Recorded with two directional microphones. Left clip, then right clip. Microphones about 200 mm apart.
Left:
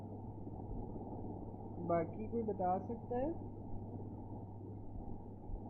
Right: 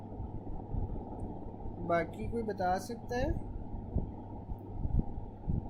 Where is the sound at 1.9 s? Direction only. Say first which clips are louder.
Right 5 dB; 25° right (ahead or behind).